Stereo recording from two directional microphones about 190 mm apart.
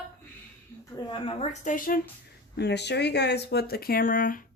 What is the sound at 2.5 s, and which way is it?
Speech, 60° left (ahead or behind).